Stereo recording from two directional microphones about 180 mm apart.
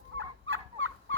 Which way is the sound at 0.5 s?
90° right.